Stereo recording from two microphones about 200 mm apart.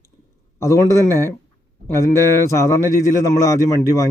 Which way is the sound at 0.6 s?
15° left (ahead or behind).